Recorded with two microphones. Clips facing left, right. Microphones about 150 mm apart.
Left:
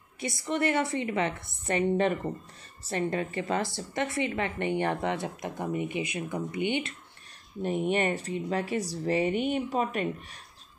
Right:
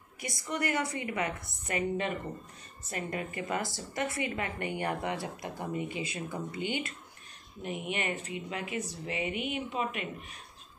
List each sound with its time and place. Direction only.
0.2 s a woman's voice: 25° left (ahead or behind)
7.6 s speech: 35° left (ahead or behind)